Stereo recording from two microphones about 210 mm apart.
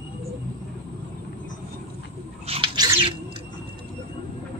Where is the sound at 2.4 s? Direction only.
25° right (ahead or behind).